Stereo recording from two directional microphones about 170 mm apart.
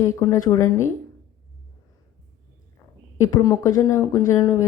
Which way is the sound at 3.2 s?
20° left (ahead or behind).